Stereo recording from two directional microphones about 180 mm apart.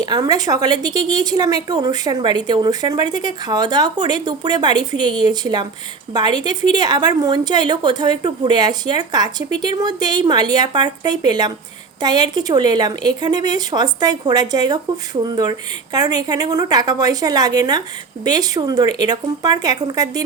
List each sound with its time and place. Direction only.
0.0 s a woman's voice: 20° right (ahead or behind)